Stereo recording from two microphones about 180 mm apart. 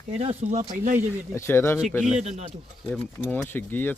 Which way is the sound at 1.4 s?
15° left (ahead or behind).